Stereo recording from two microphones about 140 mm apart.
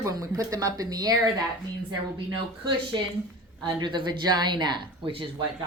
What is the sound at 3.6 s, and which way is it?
Speech, 35° right (ahead or behind).